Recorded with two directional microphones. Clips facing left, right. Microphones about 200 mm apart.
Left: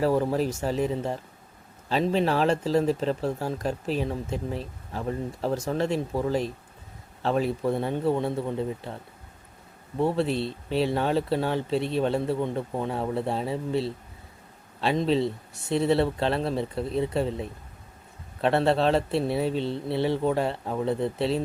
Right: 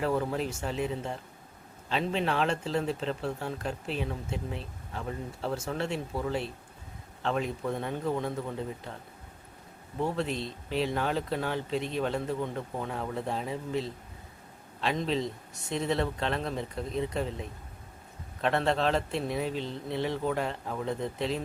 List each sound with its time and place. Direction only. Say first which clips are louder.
0.0 s speech: left 6 dB; 35° left (ahead or behind)
10.0 s speech: left 6 dB; 30° left (ahead or behind)
18.4 s speech: left 5 dB; 35° left (ahead or behind)